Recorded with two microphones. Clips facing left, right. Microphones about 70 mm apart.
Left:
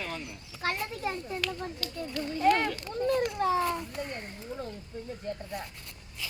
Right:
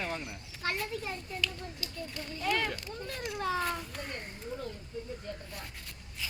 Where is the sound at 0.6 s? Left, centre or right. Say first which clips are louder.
Left 3 dB; left.